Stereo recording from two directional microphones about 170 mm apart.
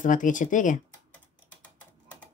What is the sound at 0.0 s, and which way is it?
Speech, 50° left (ahead or behind).